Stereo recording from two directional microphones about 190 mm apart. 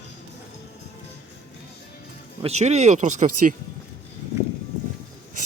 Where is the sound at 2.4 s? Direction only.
35° right (ahead or behind).